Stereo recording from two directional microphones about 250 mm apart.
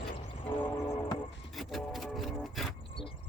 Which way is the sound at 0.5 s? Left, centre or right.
Centre.